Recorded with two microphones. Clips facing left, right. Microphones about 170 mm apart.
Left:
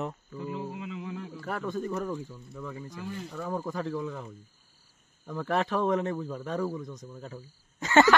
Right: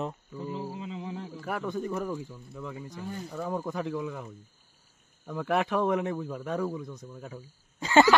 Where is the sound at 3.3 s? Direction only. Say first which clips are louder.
Right 1 dB; 10° right (ahead or behind).